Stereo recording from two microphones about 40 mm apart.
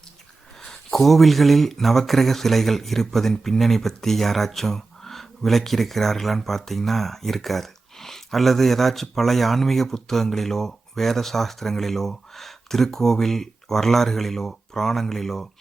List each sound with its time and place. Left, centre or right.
0.6 s speech: centre